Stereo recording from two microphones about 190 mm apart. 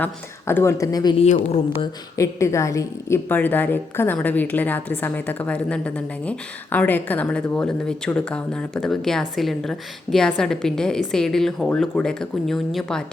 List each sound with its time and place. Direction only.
0.0 s a woman's voice: 10° left (ahead or behind)
1.2 s speech: 35° left (ahead or behind)
1.8 s a woman's voice: 15° left (ahead or behind); by 13.1 s centre (ahead or behind)